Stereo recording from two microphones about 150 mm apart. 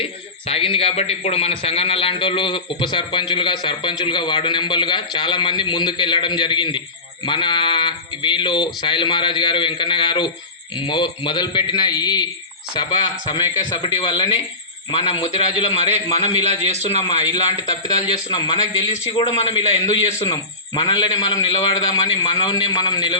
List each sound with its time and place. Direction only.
0.0 s a man's voice: 40° left (ahead or behind)